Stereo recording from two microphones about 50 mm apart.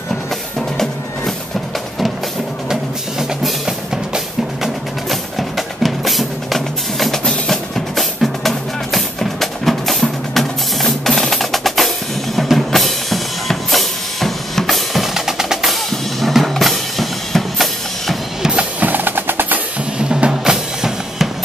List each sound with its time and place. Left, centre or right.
2.7 s music: centre
5.1 s music: centre
18.6 s percussion: right
20.0 s music: centre
20.5 s music: centre